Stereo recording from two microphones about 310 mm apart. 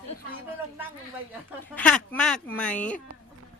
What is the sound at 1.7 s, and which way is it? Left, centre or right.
Speech, centre.